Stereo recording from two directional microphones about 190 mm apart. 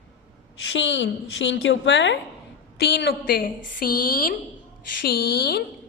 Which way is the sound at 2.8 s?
60° left (ahead or behind).